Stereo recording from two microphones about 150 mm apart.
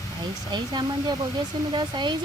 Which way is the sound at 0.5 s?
30° right (ahead or behind).